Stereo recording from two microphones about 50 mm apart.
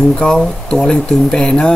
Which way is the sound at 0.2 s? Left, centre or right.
Centre.